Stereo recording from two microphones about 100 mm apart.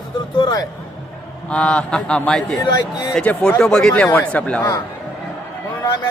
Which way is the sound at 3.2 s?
10° left (ahead or behind).